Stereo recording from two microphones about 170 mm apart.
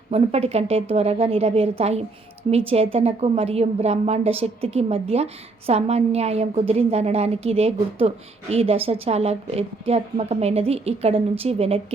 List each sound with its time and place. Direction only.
0.1 s a woman's voice: 40° right (ahead or behind)